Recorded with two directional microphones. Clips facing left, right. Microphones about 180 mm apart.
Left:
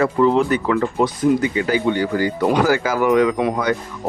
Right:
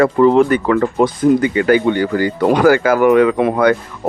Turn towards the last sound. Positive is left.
turn(degrees=-55)  # may be behind; listen again after turning